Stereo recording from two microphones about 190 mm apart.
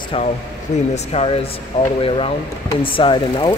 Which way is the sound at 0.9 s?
35° left (ahead or behind).